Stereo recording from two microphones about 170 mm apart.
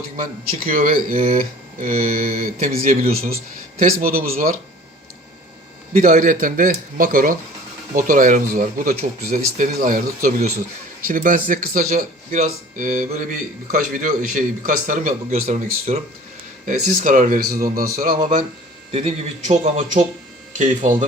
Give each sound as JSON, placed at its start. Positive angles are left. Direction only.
{"t": 0.2, "sound": "speech", "side_deg": -55}
{"t": 5.9, "sound": "speech", "side_deg": -50}
{"t": 15.9, "sound": "speech", "side_deg": -40}
{"t": 18.9, "sound": "speech", "side_deg": -40}